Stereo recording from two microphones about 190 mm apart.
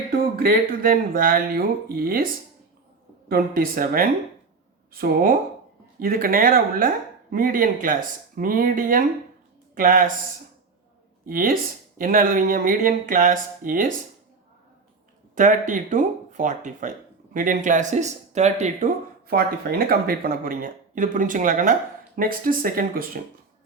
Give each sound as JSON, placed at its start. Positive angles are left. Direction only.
{"t": 0.3, "sound": "speech", "side_deg": -50}
{"t": 11.3, "sound": "speech", "side_deg": -50}
{"t": 15.4, "sound": "speech", "side_deg": -40}